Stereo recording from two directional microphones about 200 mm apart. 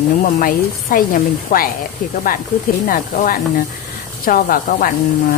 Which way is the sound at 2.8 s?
45° left (ahead or behind).